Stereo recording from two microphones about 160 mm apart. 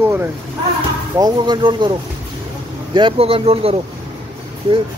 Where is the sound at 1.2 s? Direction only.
30° right (ahead or behind).